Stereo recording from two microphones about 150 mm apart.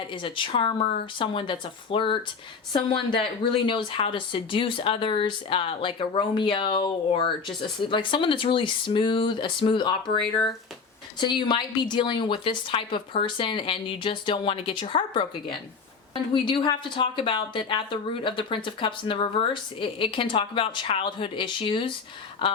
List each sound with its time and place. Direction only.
0.1 s speech: 35° left (ahead or behind)
11.2 s speech: 30° left (ahead or behind)